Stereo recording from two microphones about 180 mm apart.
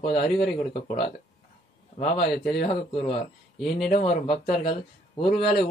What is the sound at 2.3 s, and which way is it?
Speech, centre (ahead or behind).